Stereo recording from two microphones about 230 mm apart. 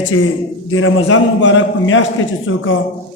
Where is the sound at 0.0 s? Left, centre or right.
Left.